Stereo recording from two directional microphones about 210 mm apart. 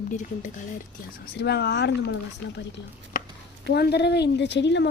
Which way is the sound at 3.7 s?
50° left (ahead or behind).